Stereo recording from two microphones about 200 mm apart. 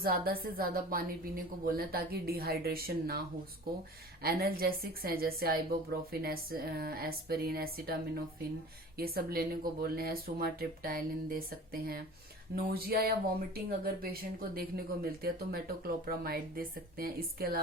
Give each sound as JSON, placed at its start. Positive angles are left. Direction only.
{"t": 0.0, "sound": "a woman's voice", "side_deg": -50}
{"t": 4.2, "sound": "a woman's voice", "side_deg": -50}